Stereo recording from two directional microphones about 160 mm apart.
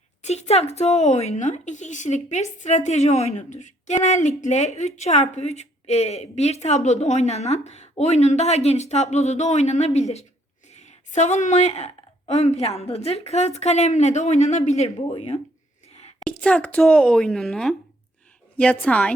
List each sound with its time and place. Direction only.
0.2 s a woman's voice: 45° left (ahead or behind)
15.0 s speech: 30° left (ahead or behind)
16.2 s a woman's voice: 5° left (ahead or behind)